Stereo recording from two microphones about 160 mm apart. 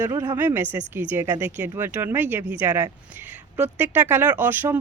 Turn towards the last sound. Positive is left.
turn(degrees=-10)  # may be behind; listen again after turning